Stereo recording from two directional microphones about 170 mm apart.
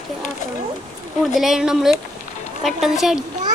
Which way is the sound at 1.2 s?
Centre (ahead or behind).